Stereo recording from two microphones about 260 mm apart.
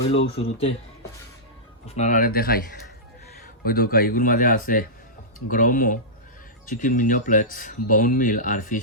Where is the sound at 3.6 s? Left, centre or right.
Left.